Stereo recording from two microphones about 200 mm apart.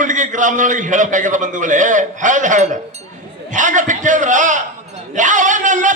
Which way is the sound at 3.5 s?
40° right (ahead or behind).